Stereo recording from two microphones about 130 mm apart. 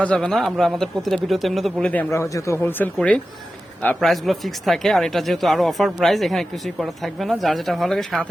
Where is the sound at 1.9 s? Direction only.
15° left (ahead or behind).